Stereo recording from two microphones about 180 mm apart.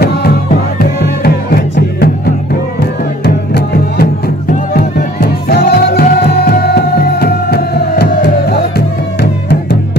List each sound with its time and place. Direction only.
0.7 s music: 60° left (ahead or behind)